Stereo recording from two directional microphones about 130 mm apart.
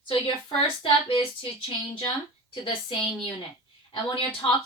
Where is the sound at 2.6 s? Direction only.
40° left (ahead or behind).